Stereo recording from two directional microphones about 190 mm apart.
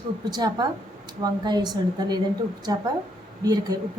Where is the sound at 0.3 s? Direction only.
20° right (ahead or behind).